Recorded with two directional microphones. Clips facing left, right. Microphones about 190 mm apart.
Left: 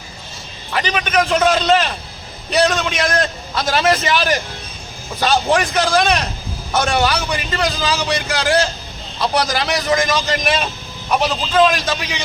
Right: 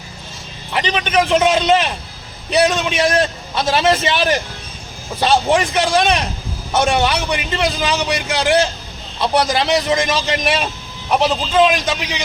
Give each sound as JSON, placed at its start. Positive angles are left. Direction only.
{"t": 0.7, "sound": "a man's voice", "side_deg": -25}